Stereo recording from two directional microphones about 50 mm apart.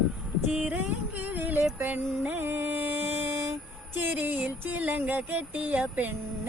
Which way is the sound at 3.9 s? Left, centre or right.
Right.